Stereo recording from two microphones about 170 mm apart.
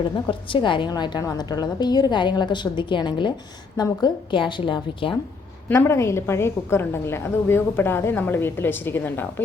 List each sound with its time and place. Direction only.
0.3 s a woman's voice: 30° left (ahead or behind)
5.6 s a woman's voice: 15° left (ahead or behind)